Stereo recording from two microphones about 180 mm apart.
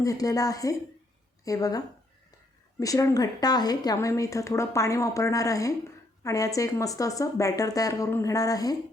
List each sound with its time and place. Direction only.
0.0 s a woman's voice: 20° left (ahead or behind)
2.8 s a woman's voice: 20° left (ahead or behind)